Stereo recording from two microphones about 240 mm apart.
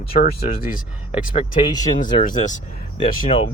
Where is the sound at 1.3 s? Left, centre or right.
Left.